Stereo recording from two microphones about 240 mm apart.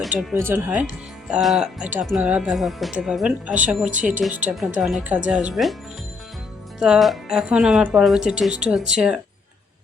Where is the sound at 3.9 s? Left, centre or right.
Right.